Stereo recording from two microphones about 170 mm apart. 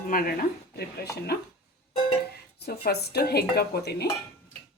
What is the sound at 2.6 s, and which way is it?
A woman's voice, 65° left (ahead or behind).